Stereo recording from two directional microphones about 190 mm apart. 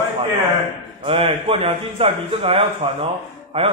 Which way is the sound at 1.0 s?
30° right (ahead or behind).